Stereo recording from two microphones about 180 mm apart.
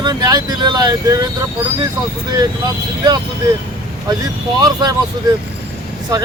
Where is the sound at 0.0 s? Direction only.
25° right (ahead or behind).